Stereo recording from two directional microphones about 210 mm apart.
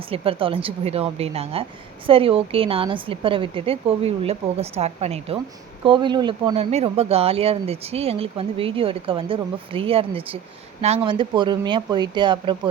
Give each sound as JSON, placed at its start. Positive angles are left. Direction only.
{"t": 0.1, "sound": "speech", "side_deg": -25}